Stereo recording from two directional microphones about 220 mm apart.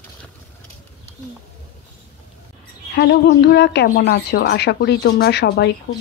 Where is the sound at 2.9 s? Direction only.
50° left (ahead or behind).